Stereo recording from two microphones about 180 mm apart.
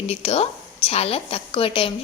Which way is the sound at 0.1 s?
35° left (ahead or behind).